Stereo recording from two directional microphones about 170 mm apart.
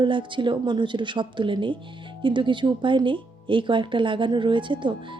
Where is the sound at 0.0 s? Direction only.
30° right (ahead or behind).